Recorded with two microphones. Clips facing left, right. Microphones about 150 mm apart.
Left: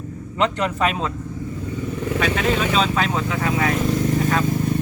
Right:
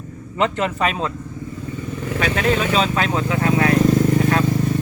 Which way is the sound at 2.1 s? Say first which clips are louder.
Right 2 dB; centre (ahead or behind).